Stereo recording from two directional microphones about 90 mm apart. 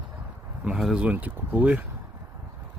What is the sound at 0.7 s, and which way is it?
Speech, 5° right (ahead or behind).